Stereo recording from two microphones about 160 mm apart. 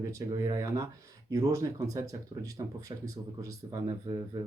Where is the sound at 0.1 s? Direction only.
20° right (ahead or behind).